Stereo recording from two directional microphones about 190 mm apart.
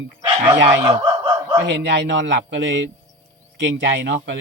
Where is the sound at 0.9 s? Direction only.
25° right (ahead or behind).